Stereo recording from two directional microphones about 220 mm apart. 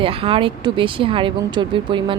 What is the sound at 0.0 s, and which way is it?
Speech, 25° right (ahead or behind).